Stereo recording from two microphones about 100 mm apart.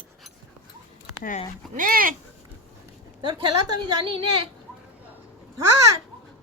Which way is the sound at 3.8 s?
55° right (ahead or behind).